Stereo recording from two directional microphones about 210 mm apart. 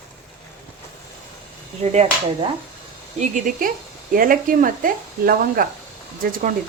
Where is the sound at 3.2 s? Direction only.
40° right (ahead or behind).